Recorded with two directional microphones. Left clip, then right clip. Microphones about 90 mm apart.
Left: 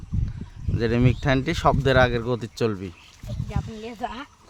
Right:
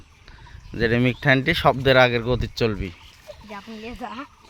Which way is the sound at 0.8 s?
5° left (ahead or behind).